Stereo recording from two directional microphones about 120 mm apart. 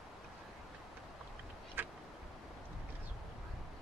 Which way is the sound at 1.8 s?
15° right (ahead or behind).